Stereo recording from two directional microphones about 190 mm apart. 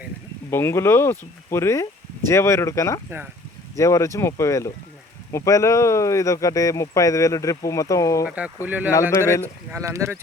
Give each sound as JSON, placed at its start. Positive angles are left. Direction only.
{"t": 0.5, "sound": "speech", "side_deg": 15}
{"t": 8.6, "sound": "speech", "side_deg": -10}